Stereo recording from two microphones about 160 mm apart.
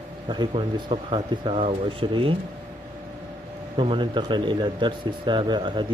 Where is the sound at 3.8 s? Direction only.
30° right (ahead or behind).